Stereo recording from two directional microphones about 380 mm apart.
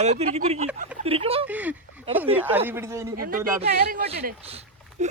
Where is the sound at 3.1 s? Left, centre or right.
Right.